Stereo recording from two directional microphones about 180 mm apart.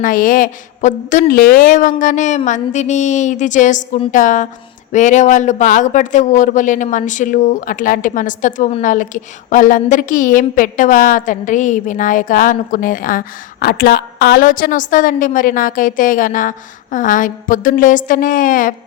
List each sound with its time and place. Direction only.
0.0 s speech: 50° left (ahead or behind)